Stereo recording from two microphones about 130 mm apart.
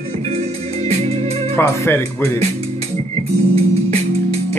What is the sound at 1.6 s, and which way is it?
Speech, 20° left (ahead or behind).